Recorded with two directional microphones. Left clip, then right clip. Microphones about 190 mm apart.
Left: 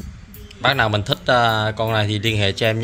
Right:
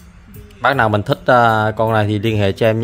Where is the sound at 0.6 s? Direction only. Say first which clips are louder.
Right 3 dB; 30° right (ahead or behind).